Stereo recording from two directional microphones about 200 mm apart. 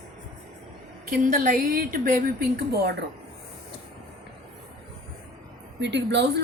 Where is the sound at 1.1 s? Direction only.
45° right (ahead or behind).